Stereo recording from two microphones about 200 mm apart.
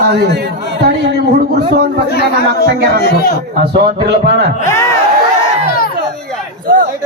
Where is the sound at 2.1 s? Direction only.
50° left (ahead or behind).